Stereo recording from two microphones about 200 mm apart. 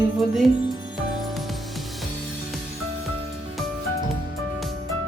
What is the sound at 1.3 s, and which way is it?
Music, centre (ahead or behind).